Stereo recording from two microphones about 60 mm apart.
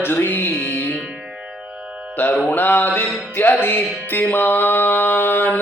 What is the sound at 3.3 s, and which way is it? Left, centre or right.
Music, left.